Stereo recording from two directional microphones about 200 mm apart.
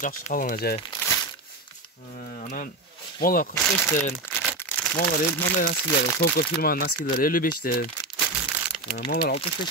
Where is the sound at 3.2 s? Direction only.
45° left (ahead or behind).